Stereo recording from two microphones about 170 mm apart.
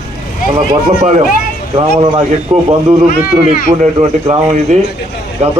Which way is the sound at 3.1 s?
55° left (ahead or behind).